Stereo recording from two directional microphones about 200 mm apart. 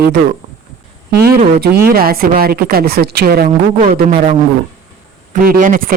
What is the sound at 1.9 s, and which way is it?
A woman's voice, 50° right (ahead or behind).